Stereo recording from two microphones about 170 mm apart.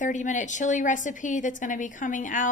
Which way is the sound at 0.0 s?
45° left (ahead or behind).